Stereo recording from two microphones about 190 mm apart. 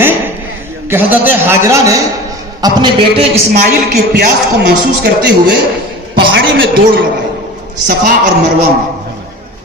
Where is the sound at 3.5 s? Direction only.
55° right (ahead or behind).